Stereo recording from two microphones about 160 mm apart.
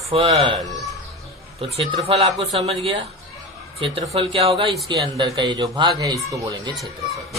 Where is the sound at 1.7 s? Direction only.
40° right (ahead or behind); by 6.7 s 20° right (ahead or behind).